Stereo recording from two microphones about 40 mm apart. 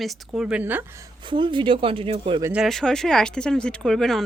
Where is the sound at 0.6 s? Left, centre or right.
Right.